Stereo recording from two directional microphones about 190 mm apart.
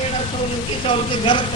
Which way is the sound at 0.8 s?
25° left (ahead or behind).